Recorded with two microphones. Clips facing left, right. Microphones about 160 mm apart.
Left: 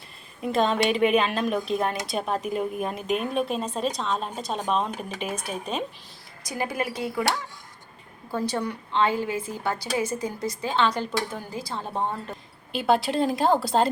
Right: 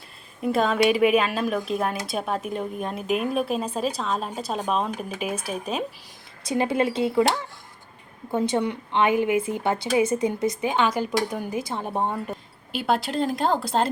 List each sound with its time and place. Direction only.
0.4 s speech: 5° right (ahead or behind)
6.4 s a woman's voice: 25° right (ahead or behind)
12.7 s speech: centre (ahead or behind)